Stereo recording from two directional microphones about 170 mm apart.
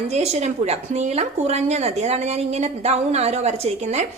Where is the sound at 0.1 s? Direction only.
40° right (ahead or behind).